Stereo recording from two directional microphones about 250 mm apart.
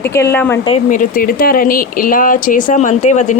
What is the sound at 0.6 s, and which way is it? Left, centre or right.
Speech, left.